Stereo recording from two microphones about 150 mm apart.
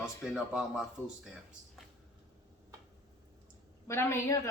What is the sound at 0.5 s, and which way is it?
Speech, 5° right (ahead or behind).